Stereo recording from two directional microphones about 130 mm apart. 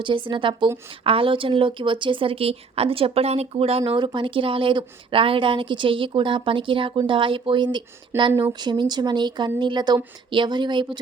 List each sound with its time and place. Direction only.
0.0 s speech: 40° right (ahead or behind)